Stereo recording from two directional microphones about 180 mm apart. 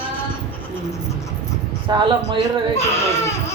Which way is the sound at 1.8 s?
25° right (ahead or behind).